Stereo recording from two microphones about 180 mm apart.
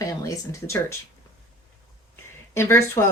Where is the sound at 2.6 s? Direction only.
15° left (ahead or behind).